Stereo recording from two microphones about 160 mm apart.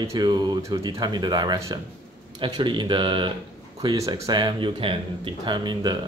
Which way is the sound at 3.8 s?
20° right (ahead or behind).